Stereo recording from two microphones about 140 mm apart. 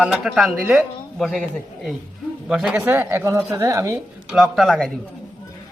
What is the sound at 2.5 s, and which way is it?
Speech, 5° right (ahead or behind).